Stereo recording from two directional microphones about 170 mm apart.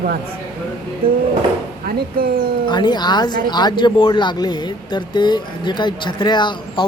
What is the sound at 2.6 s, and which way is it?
Speech, 25° left (ahead or behind).